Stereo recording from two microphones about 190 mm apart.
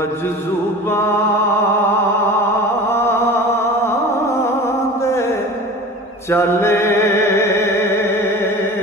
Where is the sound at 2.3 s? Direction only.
15° left (ahead or behind).